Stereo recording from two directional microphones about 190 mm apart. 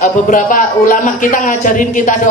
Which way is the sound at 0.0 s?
45° left (ahead or behind).